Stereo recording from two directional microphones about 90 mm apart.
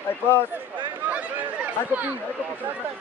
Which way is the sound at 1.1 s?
15° right (ahead or behind).